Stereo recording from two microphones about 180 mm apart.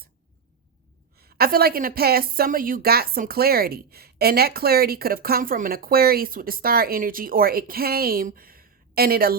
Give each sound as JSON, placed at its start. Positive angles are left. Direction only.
{"t": 1.1, "sound": "a woman's voice", "side_deg": -60}